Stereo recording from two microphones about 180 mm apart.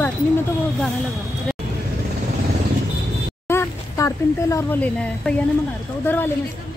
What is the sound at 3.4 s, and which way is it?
Speech, 15° left (ahead or behind).